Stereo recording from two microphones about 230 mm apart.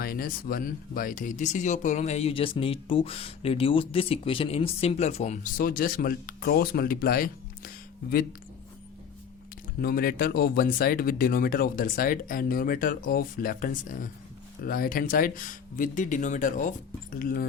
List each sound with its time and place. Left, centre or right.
0.0 s speech: left
9.8 s speech: left